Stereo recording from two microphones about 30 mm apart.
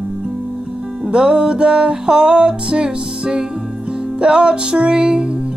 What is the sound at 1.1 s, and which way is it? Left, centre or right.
Music, right.